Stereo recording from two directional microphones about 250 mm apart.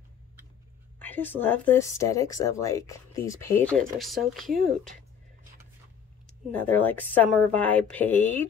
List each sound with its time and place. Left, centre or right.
0.9 s speech: centre
6.2 s speech: centre